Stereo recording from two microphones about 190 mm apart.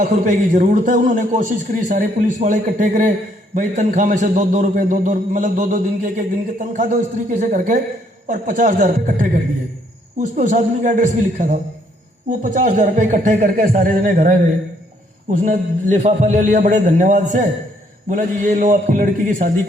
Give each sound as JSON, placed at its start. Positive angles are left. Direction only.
{"t": 0.0, "sound": "a man's voice", "side_deg": -40}